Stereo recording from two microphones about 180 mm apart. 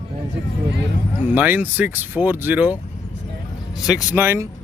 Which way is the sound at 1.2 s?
10° right (ahead or behind).